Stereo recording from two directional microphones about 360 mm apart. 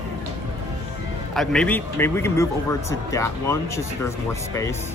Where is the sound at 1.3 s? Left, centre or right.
Centre.